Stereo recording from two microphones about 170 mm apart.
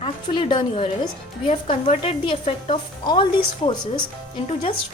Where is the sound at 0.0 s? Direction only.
30° left (ahead or behind).